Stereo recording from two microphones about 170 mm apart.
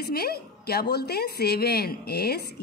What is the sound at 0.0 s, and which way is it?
A woman's voice, 65° left (ahead or behind).